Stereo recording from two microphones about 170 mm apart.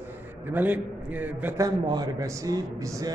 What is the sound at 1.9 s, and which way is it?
A man's voice, 20° right (ahead or behind).